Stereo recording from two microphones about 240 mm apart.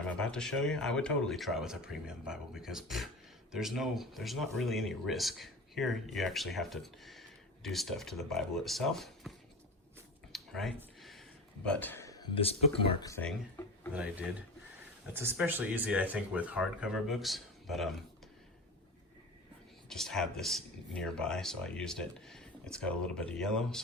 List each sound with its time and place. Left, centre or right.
0.2 s speech: centre
10.3 s a sound: centre
11.6 s speech: centre; by 12.5 s left
13.0 s speech: centre
13.9 s speech: centre
19.9 s speech: centre